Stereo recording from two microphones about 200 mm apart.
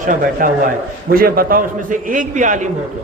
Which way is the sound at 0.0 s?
40° right (ahead or behind).